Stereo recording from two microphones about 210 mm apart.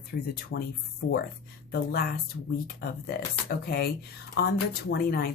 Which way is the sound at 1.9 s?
45° left (ahead or behind).